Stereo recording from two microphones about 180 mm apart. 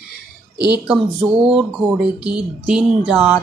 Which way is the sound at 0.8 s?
5° right (ahead or behind).